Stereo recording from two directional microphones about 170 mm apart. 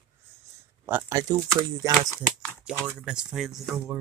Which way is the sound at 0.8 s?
15° right (ahead or behind).